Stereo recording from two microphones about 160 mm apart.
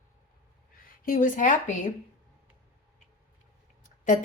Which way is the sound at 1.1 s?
55° left (ahead or behind).